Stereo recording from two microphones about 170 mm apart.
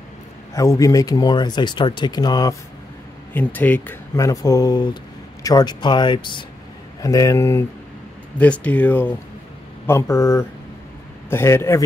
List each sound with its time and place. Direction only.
0.6 s speech: 20° left (ahead or behind)
3.3 s speech: 10° left (ahead or behind)